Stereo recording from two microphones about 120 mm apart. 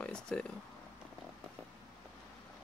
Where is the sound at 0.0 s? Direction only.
10° left (ahead or behind).